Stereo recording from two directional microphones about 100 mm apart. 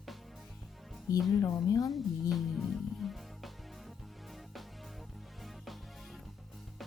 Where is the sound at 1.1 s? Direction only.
35° left (ahead or behind).